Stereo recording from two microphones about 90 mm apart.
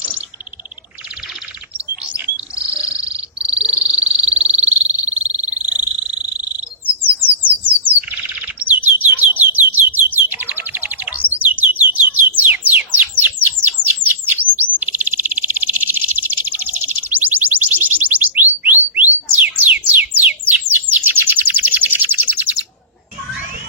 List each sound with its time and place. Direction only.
2.1 s bird: 15° right (ahead or behind)